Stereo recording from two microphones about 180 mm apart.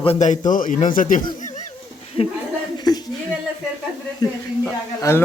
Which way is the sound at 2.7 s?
20° left (ahead or behind).